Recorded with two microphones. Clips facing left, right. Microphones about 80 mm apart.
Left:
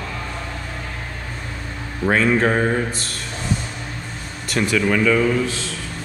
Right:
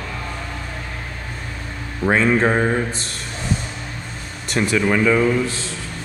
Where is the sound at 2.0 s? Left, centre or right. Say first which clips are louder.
Right 1 dB; centre.